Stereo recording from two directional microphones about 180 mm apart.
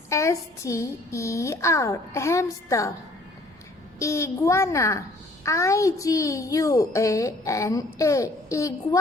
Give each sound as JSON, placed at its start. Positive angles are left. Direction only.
{"t": 0.1, "sound": "a child's voice", "side_deg": 15}
{"t": 4.0, "sound": "a child's voice", "side_deg": 15}